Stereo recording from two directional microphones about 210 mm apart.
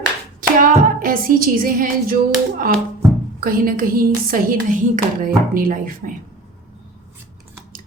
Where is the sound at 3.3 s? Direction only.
45° right (ahead or behind).